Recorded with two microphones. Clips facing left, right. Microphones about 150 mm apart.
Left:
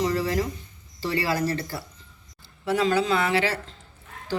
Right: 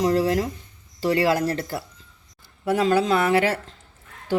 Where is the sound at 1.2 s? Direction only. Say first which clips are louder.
Right 2 dB; 55° right (ahead or behind).